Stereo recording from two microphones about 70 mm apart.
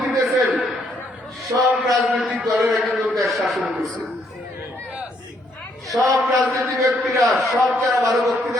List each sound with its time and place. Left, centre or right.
0.0 s a sound: centre
2.4 s a man's voice: centre
5.9 s a man's voice: centre
6.6 s a man's voice: right
7.2 s a man's voice: centre